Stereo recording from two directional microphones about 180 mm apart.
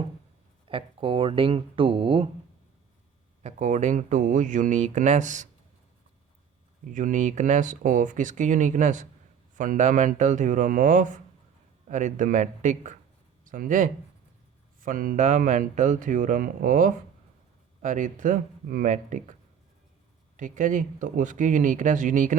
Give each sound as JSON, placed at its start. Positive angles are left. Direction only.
{"t": 0.7, "sound": "speech", "side_deg": -30}
{"t": 3.4, "sound": "speech", "side_deg": -40}
{"t": 6.8, "sound": "speech", "side_deg": -45}